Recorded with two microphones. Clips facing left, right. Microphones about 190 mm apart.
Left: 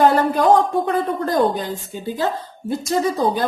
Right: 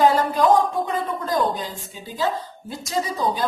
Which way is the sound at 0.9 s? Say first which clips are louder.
Left 5 dB; 65° left (ahead or behind).